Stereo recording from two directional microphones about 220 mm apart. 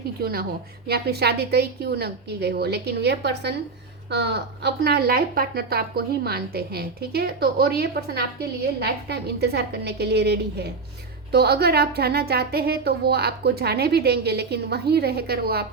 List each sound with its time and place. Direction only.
0.2 s a woman's voice: 45° right (ahead or behind)